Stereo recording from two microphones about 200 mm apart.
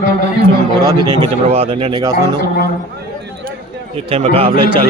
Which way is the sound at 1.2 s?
30° right (ahead or behind).